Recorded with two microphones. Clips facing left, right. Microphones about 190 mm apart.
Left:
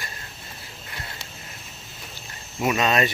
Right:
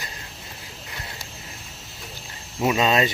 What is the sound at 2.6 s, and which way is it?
Speech, 25° right (ahead or behind).